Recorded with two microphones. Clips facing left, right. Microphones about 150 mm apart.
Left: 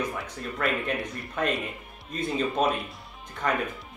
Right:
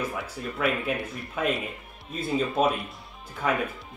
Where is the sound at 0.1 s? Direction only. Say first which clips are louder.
Right 1 dB; 5° right (ahead or behind).